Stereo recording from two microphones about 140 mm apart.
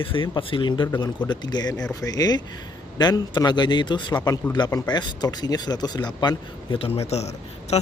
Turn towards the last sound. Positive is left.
turn(degrees=50)  # may be behind; listen again after turning